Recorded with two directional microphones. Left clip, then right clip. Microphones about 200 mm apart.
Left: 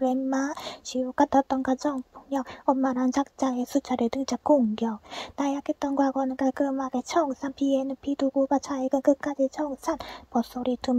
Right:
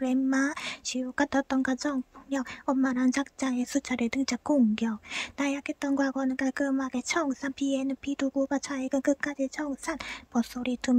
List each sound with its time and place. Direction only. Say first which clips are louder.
0.0 s speech: left 1 dB; 15° right (ahead or behind)